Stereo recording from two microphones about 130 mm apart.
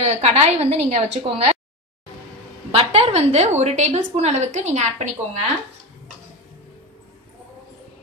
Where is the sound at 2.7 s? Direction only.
50° right (ahead or behind).